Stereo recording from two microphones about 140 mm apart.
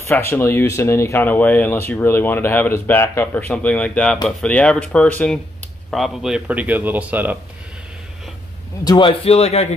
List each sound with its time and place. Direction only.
0.1 s speech: 15° left (ahead or behind); by 7.3 s 10° right (ahead or behind)
8.8 s a man's voice: 35° left (ahead or behind)